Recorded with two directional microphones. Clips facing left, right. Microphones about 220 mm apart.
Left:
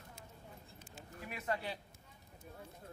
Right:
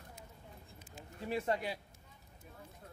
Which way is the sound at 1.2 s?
30° right (ahead or behind).